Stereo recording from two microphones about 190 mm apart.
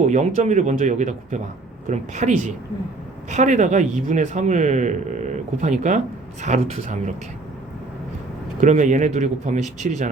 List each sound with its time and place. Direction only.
0.0 s speech: 40° right (ahead or behind)
8.6 s speech: 40° right (ahead or behind)